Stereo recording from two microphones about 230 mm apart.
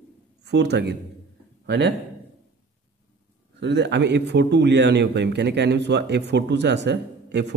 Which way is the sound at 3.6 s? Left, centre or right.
Right.